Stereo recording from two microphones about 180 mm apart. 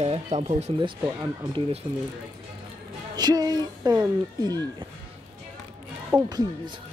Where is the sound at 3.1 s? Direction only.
20° right (ahead or behind).